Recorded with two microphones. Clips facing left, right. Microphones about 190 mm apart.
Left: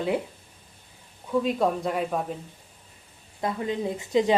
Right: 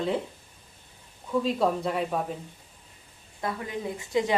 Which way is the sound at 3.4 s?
25° left (ahead or behind).